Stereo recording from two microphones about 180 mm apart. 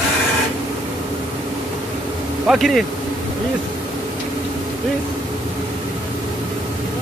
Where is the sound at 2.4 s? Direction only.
Centre (ahead or behind).